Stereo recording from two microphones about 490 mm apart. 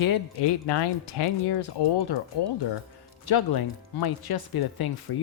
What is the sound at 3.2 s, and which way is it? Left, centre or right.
Speech, left.